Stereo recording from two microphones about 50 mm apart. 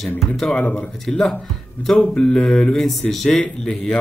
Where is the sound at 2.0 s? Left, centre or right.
Centre.